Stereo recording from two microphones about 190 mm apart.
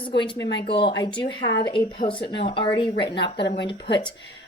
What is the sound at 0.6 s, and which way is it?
Speech, 25° left (ahead or behind).